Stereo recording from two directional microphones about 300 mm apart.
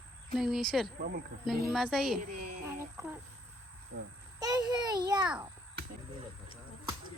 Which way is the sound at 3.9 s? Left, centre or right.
Right.